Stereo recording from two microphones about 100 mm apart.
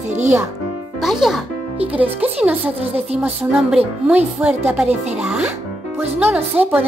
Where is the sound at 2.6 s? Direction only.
90° right.